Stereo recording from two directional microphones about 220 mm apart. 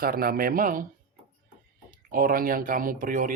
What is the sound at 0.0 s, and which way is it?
Speech, 40° right (ahead or behind).